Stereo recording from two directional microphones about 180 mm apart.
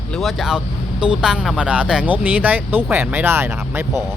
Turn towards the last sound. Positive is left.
turn(degrees=-15)  # may be behind; listen again after turning